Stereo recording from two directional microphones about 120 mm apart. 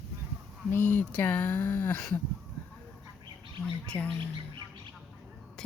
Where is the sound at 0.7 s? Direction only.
15° left (ahead or behind).